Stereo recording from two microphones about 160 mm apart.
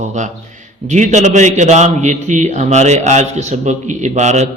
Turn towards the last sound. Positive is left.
turn(degrees=-45)  # may be behind; listen again after turning